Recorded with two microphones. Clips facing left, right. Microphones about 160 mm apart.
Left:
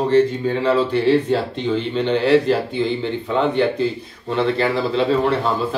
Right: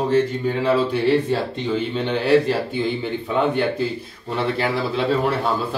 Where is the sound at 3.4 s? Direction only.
10° right (ahead or behind).